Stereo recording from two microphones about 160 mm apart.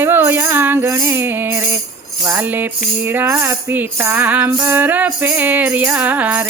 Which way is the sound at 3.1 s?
15° right (ahead or behind).